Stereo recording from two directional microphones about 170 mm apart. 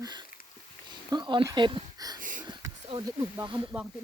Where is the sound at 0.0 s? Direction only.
25° right (ahead or behind).